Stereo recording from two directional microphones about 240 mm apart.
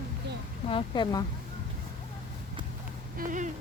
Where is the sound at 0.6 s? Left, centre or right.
Left.